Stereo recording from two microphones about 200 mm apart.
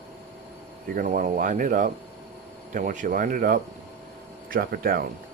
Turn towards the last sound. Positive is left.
turn(degrees=-45)  # may be behind; listen again after turning